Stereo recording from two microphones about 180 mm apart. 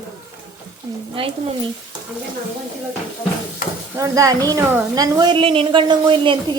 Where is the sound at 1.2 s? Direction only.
30° right (ahead or behind).